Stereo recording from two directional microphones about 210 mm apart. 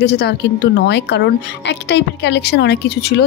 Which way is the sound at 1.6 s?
55° left (ahead or behind).